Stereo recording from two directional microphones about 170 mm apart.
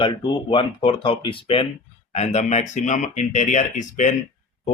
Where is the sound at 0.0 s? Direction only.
30° left (ahead or behind).